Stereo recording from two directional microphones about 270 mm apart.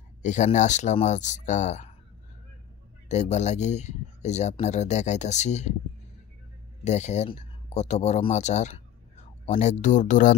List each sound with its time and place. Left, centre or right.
0.2 s speech: left
3.1 s speech: left
6.8 s speech: left